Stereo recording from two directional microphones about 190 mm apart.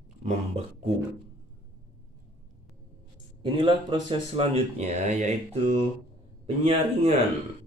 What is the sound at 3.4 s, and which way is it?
Speech, 25° right (ahead or behind).